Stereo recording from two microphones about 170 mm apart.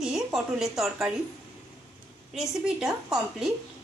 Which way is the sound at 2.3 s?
5° right (ahead or behind).